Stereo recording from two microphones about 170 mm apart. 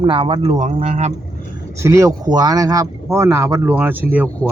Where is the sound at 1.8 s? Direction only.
20° right (ahead or behind).